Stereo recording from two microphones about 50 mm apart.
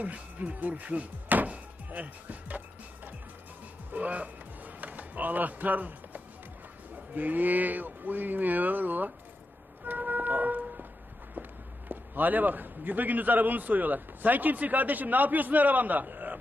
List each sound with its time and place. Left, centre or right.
0.0 s speech: right
3.9 s music: right
6.9 s a man's voice: right
9.8 s a sound: right
11.9 s a man's voice: right